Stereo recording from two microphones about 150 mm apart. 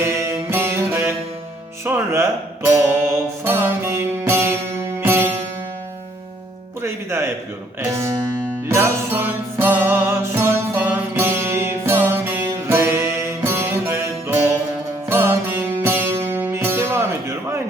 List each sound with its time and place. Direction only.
0.0 s music: 20° right (ahead or behind)
1.8 s speech: 15° right (ahead or behind)
3.4 s music: 15° right (ahead or behind)
6.8 s music: 15° right (ahead or behind)
7.8 s speech: 15° right (ahead or behind)
8.6 s music: 15° right (ahead or behind)